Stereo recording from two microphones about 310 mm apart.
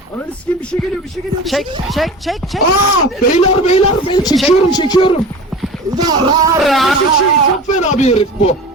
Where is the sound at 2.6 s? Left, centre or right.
Left.